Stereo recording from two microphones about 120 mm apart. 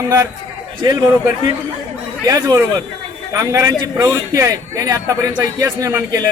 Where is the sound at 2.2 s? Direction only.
30° right (ahead or behind).